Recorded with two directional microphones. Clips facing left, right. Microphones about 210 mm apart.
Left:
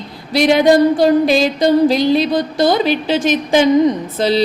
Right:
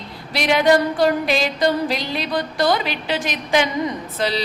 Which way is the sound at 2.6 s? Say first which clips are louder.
Left 6 dB; 35° left (ahead or behind).